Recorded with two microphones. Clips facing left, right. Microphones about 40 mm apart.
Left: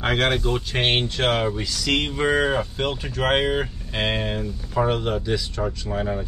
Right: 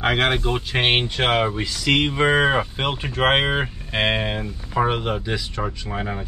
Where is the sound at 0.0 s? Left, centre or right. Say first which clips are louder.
Right 1 dB; centre.